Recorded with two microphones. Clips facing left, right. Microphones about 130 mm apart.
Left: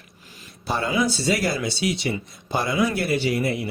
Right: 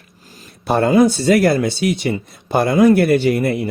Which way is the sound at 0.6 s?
55° right (ahead or behind).